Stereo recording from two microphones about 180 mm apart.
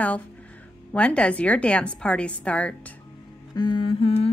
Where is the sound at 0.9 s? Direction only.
5° left (ahead or behind).